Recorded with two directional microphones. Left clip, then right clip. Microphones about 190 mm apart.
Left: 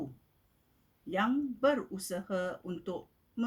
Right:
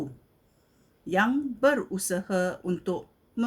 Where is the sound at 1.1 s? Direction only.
50° right (ahead or behind).